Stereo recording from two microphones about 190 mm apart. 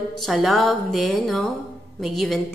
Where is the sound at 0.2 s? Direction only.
Centre (ahead or behind).